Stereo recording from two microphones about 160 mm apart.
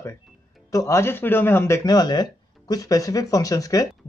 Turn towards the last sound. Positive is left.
turn(degrees=20)  # may be behind; listen again after turning